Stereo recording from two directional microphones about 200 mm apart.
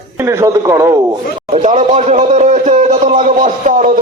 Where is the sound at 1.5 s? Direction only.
35° right (ahead or behind).